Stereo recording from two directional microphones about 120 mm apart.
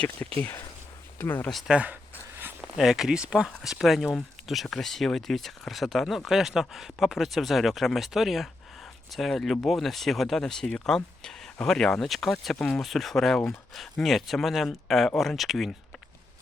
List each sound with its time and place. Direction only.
0.2 s speech: 20° left (ahead or behind)
1.5 s speech: centre (ahead or behind)
2.4 s a sound: 15° right (ahead or behind)
2.7 s speech: 5° right (ahead or behind)